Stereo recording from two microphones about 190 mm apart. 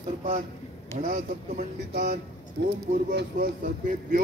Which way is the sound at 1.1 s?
50° right (ahead or behind).